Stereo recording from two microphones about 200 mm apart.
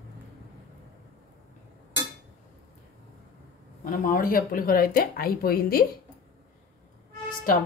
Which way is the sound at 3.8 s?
45° left (ahead or behind).